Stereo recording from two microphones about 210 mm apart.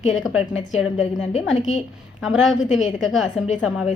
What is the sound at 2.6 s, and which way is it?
Speech, 35° left (ahead or behind).